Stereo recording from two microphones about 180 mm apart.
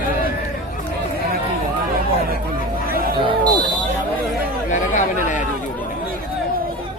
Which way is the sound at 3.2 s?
25° right (ahead or behind).